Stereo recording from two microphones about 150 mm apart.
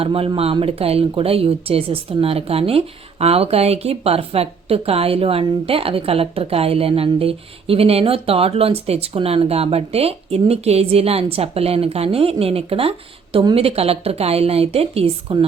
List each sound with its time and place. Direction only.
0.0 s speech: 40° right (ahead or behind)